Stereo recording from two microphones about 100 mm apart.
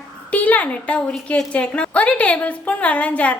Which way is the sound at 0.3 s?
15° left (ahead or behind).